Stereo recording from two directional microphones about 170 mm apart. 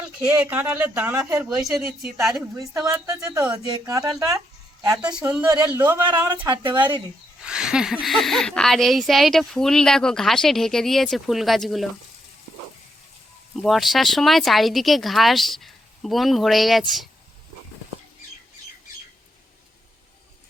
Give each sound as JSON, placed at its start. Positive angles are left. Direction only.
{"t": 0.3, "sound": "speech", "side_deg": -10}
{"t": 2.9, "sound": "speech", "side_deg": -20}
{"t": 4.9, "sound": "speech", "side_deg": -5}
{"t": 6.3, "sound": "speech", "side_deg": -30}
{"t": 7.4, "sound": "speech", "side_deg": -5}
{"t": 13.6, "sound": "speech", "side_deg": 0}